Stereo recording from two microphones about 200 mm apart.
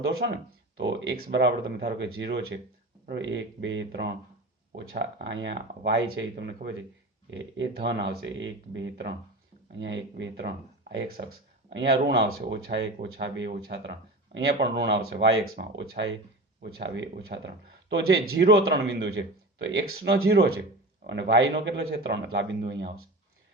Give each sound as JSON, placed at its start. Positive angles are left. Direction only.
{"t": 0.8, "sound": "speech", "side_deg": -60}
{"t": 16.6, "sound": "speech", "side_deg": -50}